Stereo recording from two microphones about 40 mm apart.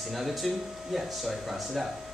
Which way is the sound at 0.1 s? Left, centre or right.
Centre.